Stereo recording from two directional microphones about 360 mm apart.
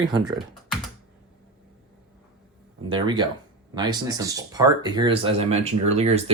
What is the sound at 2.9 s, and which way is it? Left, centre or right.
Speech, centre.